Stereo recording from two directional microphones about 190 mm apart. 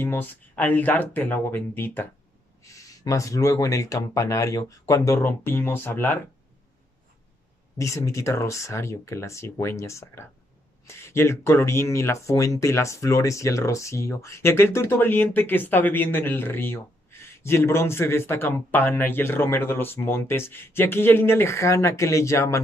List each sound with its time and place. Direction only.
0.0 s speech: 10° left (ahead or behind)
7.7 s speech: 15° left (ahead or behind)